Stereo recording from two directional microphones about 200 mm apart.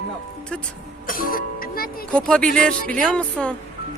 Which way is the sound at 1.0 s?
45° left (ahead or behind).